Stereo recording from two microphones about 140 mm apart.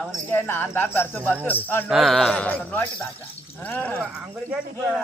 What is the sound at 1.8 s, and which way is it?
A man's voice, centre (ahead or behind).